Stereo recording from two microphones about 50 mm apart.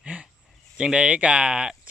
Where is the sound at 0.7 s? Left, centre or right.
Centre.